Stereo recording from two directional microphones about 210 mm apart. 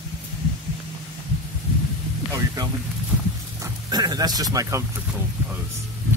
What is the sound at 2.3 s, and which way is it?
Speech, 15° right (ahead or behind).